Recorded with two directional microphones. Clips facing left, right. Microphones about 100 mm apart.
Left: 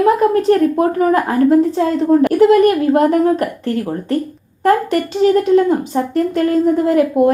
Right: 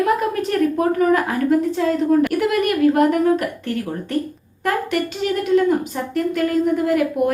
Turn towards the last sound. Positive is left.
turn(degrees=30)  # may be behind; listen again after turning